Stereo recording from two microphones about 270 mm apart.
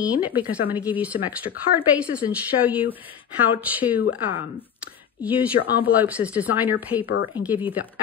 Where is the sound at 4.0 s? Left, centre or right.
Left.